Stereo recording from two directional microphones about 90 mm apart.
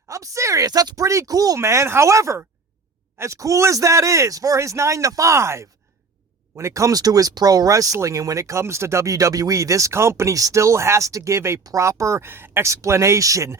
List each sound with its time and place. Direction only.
0.1 s speech: 35° right (ahead or behind)